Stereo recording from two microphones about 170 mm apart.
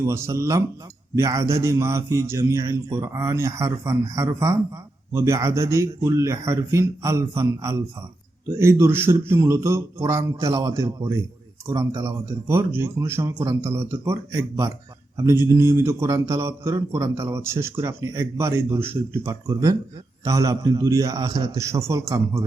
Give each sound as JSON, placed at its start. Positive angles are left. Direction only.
{"t": 0.0, "sound": "a man's voice", "side_deg": -15}